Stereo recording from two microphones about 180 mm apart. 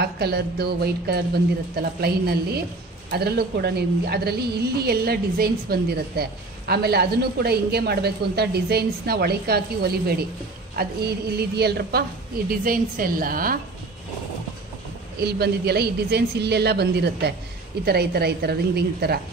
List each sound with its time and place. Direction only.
0.0 s a woman's voice: 60° right (ahead or behind)
11.3 s a woman's voice: 65° right (ahead or behind)
12.4 s a woman's voice: 50° right (ahead or behind)
15.1 s a woman's voice: 60° right (ahead or behind)